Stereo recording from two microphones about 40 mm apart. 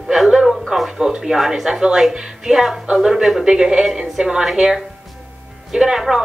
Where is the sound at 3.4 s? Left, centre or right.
Centre.